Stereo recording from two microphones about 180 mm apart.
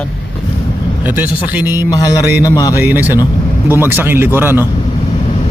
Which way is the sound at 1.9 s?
20° left (ahead or behind).